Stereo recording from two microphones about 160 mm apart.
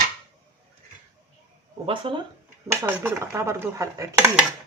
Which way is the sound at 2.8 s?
15° right (ahead or behind).